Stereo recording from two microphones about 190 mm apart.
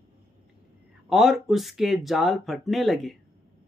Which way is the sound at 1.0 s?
Centre (ahead or behind).